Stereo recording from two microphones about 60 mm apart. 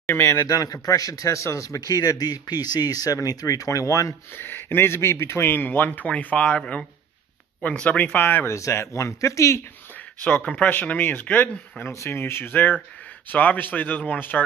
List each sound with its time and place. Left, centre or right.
0.0 s speech: left
0.5 s a man's voice: left
4.4 s a man's voice: left
7.7 s speech: left
8.1 s a man's voice: left
8.5 s speech: left
10.2 s speech: left
11.9 s speech: left
12.2 s a man's voice: left